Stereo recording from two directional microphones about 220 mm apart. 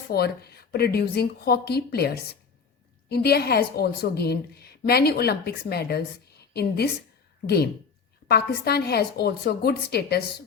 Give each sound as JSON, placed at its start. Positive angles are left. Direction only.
{"t": 0.1, "sound": "a woman's voice", "side_deg": 45}